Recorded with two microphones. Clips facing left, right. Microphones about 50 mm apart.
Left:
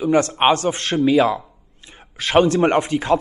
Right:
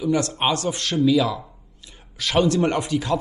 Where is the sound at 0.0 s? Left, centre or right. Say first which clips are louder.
Left 5 dB; left.